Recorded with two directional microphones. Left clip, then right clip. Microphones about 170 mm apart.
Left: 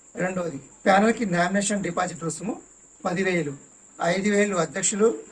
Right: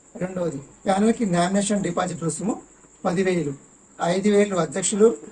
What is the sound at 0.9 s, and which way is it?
Speech, centre (ahead or behind).